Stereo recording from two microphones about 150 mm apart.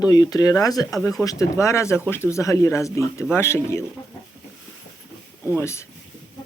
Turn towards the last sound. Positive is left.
turn(degrees=20)  # may be behind; listen again after turning